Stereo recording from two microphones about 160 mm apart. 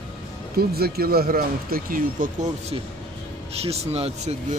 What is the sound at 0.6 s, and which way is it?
Speech, 75° right (ahead or behind).